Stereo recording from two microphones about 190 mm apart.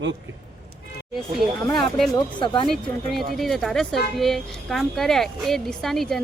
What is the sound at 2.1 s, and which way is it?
Speech, 25° left (ahead or behind).